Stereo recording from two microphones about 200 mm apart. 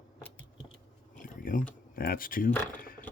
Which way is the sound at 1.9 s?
45° left (ahead or behind).